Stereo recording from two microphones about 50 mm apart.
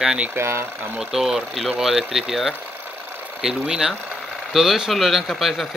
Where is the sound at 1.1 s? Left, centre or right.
Centre.